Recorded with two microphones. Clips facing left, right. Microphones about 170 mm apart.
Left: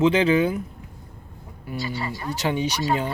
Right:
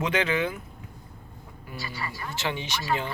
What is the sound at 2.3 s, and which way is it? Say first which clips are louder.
Speech: left 7 dB; 40° left (ahead or behind).